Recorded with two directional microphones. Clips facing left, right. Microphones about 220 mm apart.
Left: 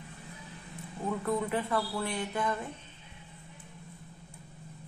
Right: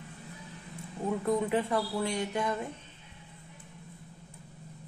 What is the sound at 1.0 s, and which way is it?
Speech, 20° right (ahead or behind).